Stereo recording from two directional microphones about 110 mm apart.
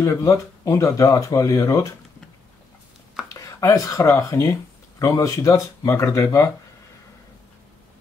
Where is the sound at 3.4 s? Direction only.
30° left (ahead or behind).